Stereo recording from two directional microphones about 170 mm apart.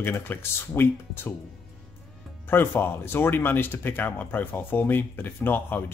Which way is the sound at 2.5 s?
15° left (ahead or behind).